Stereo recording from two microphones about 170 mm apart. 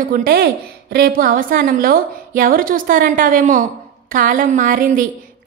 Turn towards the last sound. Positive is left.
turn(degrees=-55)  # may be behind; listen again after turning